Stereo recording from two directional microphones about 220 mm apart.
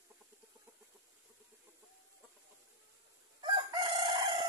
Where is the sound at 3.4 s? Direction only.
20° right (ahead or behind).